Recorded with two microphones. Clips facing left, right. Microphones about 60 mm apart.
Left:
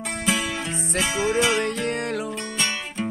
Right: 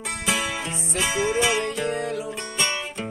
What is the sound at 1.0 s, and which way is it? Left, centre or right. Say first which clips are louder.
Music: even; centre.